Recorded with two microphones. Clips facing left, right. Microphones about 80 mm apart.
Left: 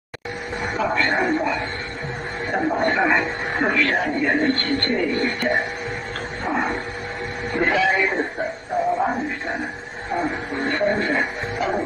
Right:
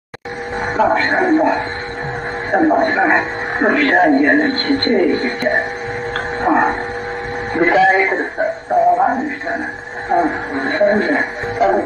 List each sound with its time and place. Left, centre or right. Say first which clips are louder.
0.7 s a man's voice: right 7 dB; right
6.4 s dog: right 9 dB; right
7.5 s speech: right 7 dB; right
9.0 s music: right 7 dB; right